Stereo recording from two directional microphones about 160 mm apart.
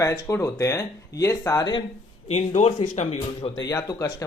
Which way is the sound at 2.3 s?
45° left (ahead or behind).